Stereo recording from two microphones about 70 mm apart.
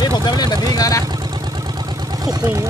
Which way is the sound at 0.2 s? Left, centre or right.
Left.